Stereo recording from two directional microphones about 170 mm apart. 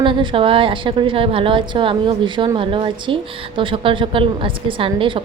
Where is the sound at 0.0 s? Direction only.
30° right (ahead or behind).